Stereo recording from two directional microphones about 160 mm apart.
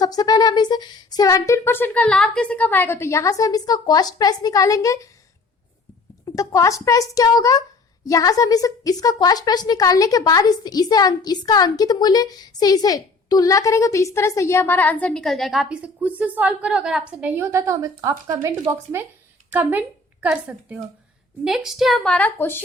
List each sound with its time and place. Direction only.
0.0 s a woman's voice: 25° left (ahead or behind)
6.2 s a woman's voice: 20° left (ahead or behind); by 19.0 s 15° right (ahead or behind)
20.2 s a woman's voice: 10° right (ahead or behind); by 22.6 s 10° left (ahead or behind)